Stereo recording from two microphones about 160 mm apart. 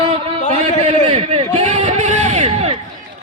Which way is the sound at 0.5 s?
40° right (ahead or behind).